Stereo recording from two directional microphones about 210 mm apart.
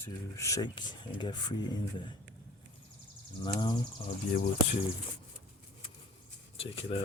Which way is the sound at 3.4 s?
20° left (ahead or behind).